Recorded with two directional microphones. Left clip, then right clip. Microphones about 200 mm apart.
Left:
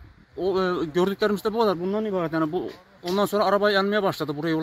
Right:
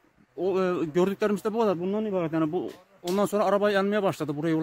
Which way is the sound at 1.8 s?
Centre (ahead or behind).